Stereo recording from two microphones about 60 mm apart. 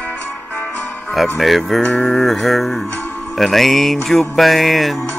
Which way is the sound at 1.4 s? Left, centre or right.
Centre.